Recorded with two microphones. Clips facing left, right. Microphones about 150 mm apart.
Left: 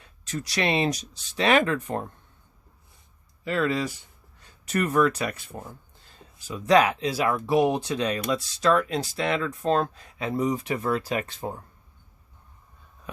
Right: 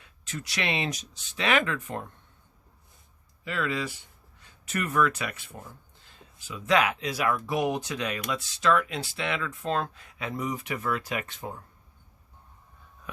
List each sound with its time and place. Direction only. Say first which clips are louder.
0.0 s speech: left 5 dB; 35° left (ahead or behind)
3.4 s speech: left 5 dB; 40° left (ahead or behind)